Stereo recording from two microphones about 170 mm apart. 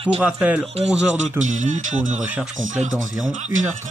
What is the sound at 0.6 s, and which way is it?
Speech, 35° right (ahead or behind).